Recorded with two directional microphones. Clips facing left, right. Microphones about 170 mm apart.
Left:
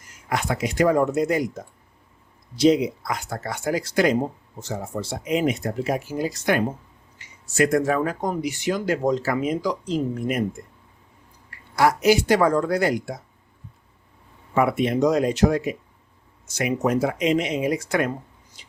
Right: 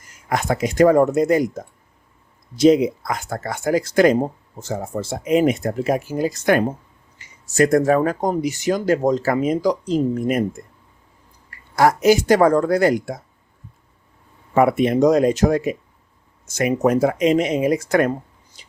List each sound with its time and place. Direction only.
0.3 s speech: 45° right (ahead or behind)
11.8 s speech: 45° right (ahead or behind)
14.5 s speech: 45° right (ahead or behind)